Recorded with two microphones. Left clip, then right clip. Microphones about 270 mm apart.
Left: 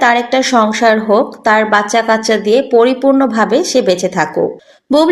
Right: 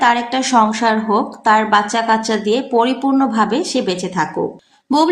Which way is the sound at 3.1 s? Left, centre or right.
Right.